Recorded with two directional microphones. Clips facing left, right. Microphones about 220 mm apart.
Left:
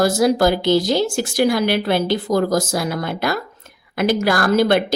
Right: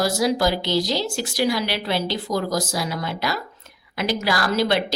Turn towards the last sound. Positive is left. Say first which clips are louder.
# left 5 dB
turn(degrees=50)  # may be behind; listen again after turning